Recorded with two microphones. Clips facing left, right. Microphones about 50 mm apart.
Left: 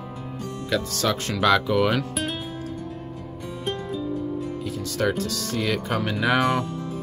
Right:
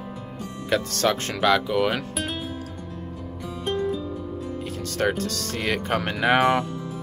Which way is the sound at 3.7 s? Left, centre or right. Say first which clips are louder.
Right 4 dB; centre.